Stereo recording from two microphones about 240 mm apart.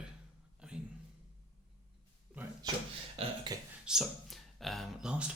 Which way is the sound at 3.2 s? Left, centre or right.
Centre.